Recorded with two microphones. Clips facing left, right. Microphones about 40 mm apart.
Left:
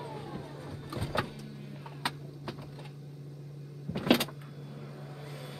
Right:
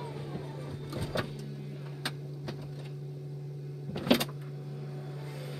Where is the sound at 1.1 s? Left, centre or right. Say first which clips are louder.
Left 2 dB; left.